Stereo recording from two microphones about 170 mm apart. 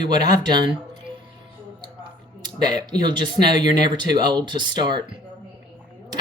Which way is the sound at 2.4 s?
25° right (ahead or behind).